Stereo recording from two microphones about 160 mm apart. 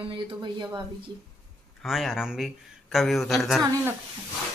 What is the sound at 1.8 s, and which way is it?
Speech, centre (ahead or behind).